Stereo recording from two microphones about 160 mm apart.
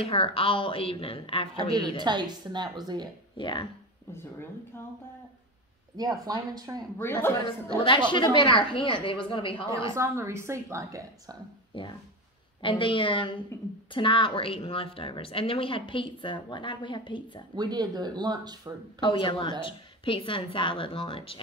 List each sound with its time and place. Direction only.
0.0 s a woman's voice: 35° left (ahead or behind)
1.6 s speech: 25° right (ahead or behind)
3.3 s a woman's voice: 30° left (ahead or behind)
4.1 s speech: 15° left (ahead or behind)
5.9 s speech: 25° right (ahead or behind)
7.0 s speech: 15° left (ahead or behind)
7.4 s a woman's voice: 35° left (ahead or behind)
9.9 s a woman's voice: 15° right (ahead or behind)
12.6 s a woman's voice: 30° left (ahead or behind)
17.6 s speech: 25° right (ahead or behind)
18.9 s a woman's voice: 30° left (ahead or behind)